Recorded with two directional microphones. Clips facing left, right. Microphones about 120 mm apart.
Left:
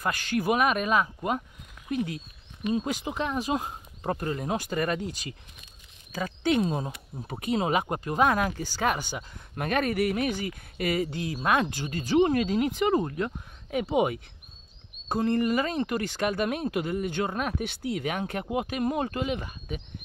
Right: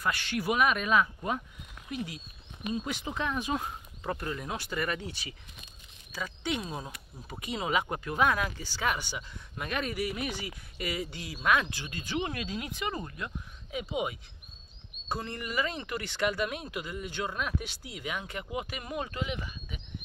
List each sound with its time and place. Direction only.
0.0 s speech: 45° left (ahead or behind)
3.2 s speech: 35° left (ahead or behind)
6.1 s speech: 50° left (ahead or behind)
6.6 s speech: 25° left (ahead or behind)
7.2 s speech: 55° left (ahead or behind)
7.9 s speech: 35° left (ahead or behind)
13.1 s speech: 55° left (ahead or behind)
15.0 s speech: 45° left (ahead or behind)